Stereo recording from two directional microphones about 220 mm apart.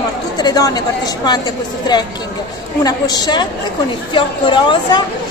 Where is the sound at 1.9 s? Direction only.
20° left (ahead or behind).